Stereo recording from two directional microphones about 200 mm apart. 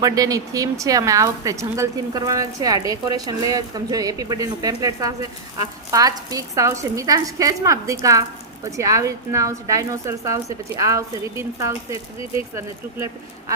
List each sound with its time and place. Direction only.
0.0 s a woman's voice: 20° right (ahead or behind)